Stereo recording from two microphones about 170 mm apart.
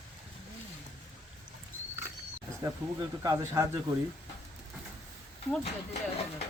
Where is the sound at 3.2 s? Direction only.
20° right (ahead or behind).